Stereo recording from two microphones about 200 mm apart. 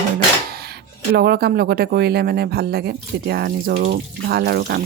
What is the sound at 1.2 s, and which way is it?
Speech, 50° right (ahead or behind).